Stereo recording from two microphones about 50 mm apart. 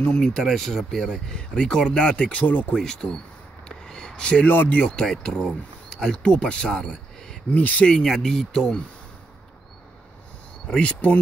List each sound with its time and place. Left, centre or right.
0.0 s speech: centre
0.4 s speech: centre; by 2.4 s left
2.4 s speech: left
2.7 s speech: centre
3.6 s a sound: centre
4.5 s speech: left
4.9 s speech: centre
7.5 s speech: left
7.8 s speech: centre
10.7 s speech: left